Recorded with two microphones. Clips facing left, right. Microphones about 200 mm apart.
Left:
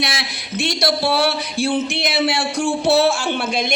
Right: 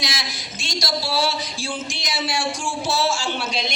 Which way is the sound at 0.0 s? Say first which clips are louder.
Left 5 dB; 60° left (ahead or behind).